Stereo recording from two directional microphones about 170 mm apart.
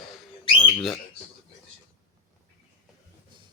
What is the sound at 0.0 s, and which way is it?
Bird, centre (ahead or behind).